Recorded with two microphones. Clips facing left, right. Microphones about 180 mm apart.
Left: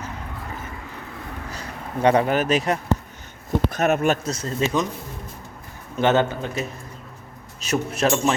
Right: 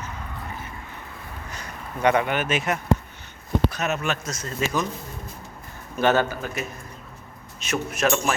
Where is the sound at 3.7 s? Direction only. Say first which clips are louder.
Left 7 dB; 50° left (ahead or behind).